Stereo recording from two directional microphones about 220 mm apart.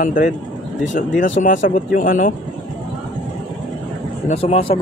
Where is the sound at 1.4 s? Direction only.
35° left (ahead or behind).